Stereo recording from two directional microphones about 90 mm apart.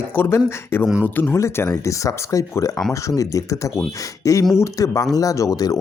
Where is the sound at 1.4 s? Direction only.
35° left (ahead or behind).